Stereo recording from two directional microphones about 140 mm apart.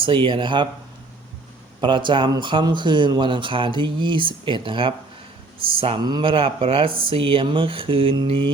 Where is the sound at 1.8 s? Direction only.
35° right (ahead or behind).